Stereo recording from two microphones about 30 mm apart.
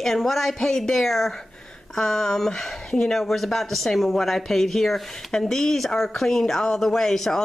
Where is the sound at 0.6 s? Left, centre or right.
Centre.